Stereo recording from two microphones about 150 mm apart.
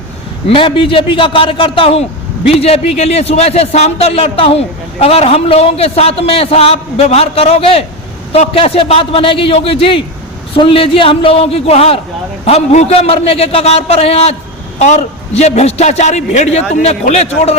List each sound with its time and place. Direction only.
0.4 s a man's voice: 35° left (ahead or behind)